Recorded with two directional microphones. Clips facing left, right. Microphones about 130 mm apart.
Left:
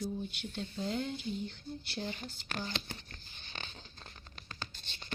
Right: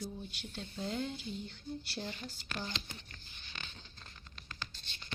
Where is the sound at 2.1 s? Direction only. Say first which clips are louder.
Left 2 dB; 45° left (ahead or behind).